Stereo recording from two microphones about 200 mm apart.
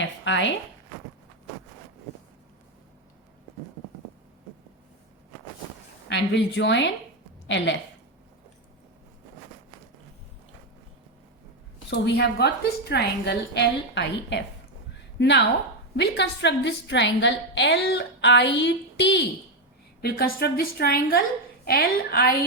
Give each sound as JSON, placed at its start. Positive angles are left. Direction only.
{"t": 0.0, "sound": "a sound", "side_deg": 65}
{"t": 6.1, "sound": "a woman's voice", "side_deg": 60}
{"t": 11.9, "sound": "a woman's voice", "side_deg": 55}
{"t": 20.0, "sound": "a woman's voice", "side_deg": 50}